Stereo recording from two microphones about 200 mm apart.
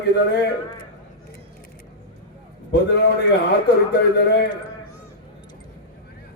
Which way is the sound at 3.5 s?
55° left (ahead or behind).